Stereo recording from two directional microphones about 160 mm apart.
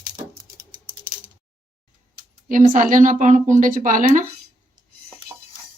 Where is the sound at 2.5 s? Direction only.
55° right (ahead or behind).